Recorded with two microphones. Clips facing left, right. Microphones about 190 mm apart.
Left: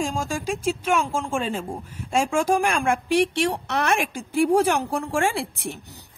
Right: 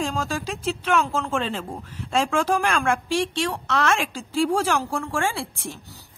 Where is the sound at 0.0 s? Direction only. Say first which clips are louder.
Even; 15° left (ahead or behind).